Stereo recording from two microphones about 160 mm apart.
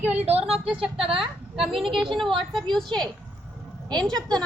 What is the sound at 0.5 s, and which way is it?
Speech, 5° right (ahead or behind).